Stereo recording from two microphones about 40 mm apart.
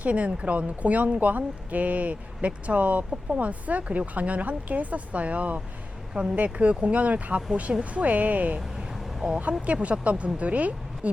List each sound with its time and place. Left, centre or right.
0.0 s speech: right